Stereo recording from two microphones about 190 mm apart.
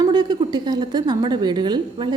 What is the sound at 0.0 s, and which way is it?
A woman's voice, 20° right (ahead or behind).